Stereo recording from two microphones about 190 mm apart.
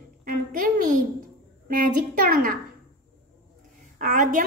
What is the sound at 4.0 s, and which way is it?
Speech, 45° right (ahead or behind).